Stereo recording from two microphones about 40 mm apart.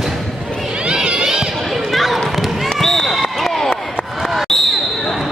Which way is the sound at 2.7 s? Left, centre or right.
Centre.